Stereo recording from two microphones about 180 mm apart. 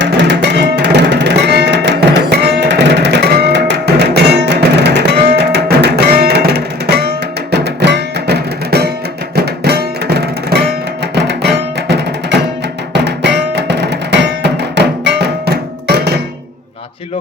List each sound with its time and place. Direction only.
0.0 s music: 75° right (ahead or behind)
12.9 s music: 70° right (ahead or behind)